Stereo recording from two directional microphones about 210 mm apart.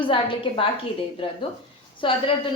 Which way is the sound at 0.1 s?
25° left (ahead or behind).